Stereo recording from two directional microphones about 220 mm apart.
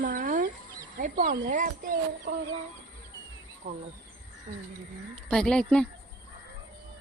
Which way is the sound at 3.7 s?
35° right (ahead or behind).